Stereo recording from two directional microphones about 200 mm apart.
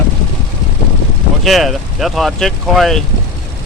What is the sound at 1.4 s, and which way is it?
Speech, centre (ahead or behind).